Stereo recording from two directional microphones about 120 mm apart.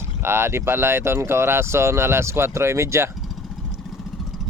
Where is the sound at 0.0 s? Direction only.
20° right (ahead or behind).